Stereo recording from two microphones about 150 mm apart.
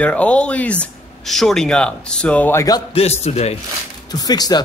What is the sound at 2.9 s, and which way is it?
Speech, 45° left (ahead or behind).